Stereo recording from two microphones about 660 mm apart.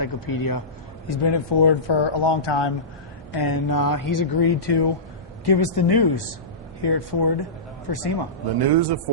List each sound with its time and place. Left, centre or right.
0.0 s speech: left
8.6 s a man's voice: right